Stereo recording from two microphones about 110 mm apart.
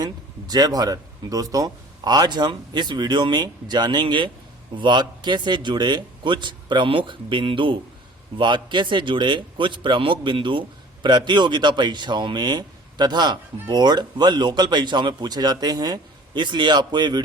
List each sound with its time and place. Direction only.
0.0 s a man's voice: 35° right (ahead or behind)